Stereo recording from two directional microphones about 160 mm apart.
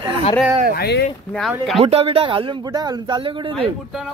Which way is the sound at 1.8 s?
40° right (ahead or behind).